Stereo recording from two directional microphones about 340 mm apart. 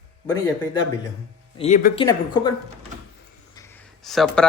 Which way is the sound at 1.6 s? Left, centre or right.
Centre.